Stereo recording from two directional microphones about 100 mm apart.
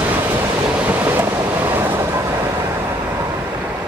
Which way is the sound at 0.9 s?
20° right (ahead or behind).